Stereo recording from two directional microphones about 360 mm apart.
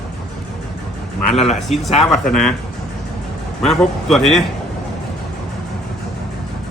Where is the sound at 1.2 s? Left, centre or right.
Centre.